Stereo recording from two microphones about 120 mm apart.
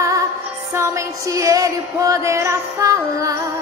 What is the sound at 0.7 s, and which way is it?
Music, 25° right (ahead or behind).